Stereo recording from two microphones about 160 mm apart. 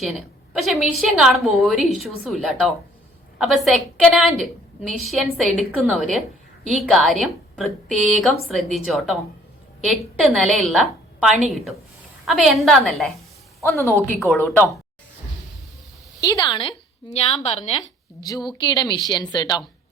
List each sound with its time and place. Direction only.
0.0 s a woman's voice: centre (ahead or behind)
13.7 s a woman's voice: 15° left (ahead or behind)
16.2 s a woman's voice: 25° left (ahead or behind)
17.1 s a woman's voice: 40° left (ahead or behind)
18.2 s a woman's voice: 25° left (ahead or behind)